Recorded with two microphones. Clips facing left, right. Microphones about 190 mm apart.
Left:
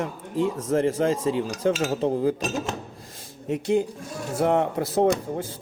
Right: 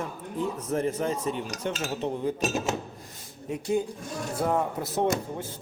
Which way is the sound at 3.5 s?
75° left (ahead or behind).